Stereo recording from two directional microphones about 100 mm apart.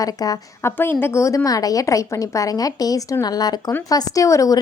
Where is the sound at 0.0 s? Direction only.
35° left (ahead or behind).